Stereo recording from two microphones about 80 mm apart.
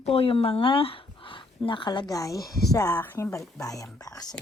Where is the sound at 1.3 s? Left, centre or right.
Left.